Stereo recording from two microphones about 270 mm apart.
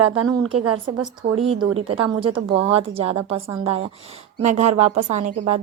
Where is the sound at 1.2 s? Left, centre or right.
Centre.